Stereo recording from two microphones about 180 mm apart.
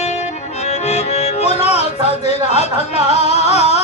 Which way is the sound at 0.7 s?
35° left (ahead or behind).